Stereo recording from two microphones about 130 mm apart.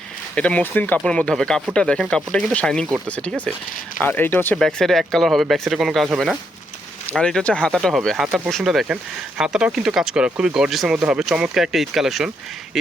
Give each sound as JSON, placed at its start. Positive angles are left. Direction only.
{"t": 0.3, "sound": "speech", "side_deg": 10}
{"t": 4.6, "sound": "speech", "side_deg": 5}